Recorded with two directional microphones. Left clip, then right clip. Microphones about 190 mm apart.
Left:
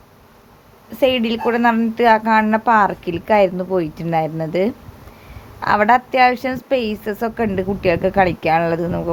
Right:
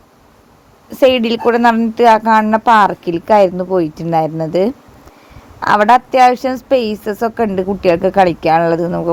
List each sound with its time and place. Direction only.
0.9 s a woman's voice: 35° right (ahead or behind)